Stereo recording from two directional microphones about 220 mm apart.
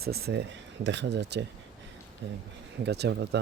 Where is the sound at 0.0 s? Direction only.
45° right (ahead or behind).